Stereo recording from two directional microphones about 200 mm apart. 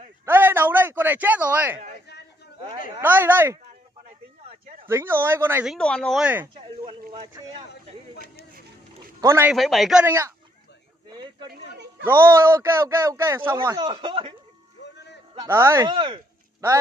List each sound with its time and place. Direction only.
0.2 s a sound: 10° right (ahead or behind)
2.1 s a sound: 55° left (ahead or behind)
3.0 s speech: 10° right (ahead or behind)
4.5 s a sound: 35° right (ahead or behind)
4.8 s speech: 10° right (ahead or behind)
5.8 s speech: 5° left (ahead or behind)
9.2 s speech: 10° right (ahead or behind)
9.6 s speech: centre (ahead or behind)
11.1 s a sound: 20° right (ahead or behind)
12.0 s speech: 10° right (ahead or behind)
15.4 s speech: 10° right (ahead or behind)
15.9 s speech: 25° right (ahead or behind)